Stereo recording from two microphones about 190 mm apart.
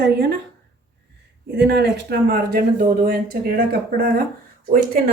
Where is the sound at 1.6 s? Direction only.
65° right (ahead or behind).